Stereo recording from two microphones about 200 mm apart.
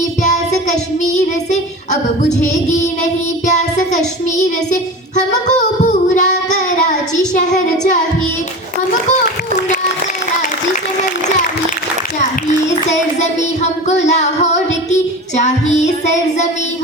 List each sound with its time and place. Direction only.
0.2 s child singing: 35° left (ahead or behind)
13.1 s singing: 35° left (ahead or behind)